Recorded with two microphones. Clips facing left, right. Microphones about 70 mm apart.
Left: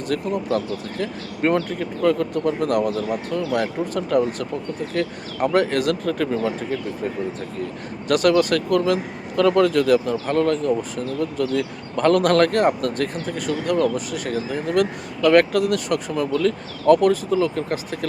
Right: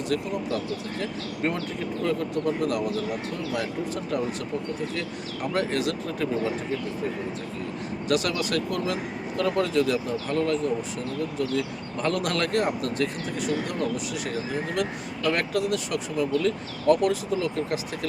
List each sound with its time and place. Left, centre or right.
0.1 s speech: left
8.0 s speech: left